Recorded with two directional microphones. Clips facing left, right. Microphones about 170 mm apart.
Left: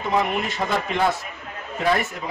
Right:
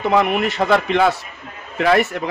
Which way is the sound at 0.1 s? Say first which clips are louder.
Right 4 dB; 70° right (ahead or behind).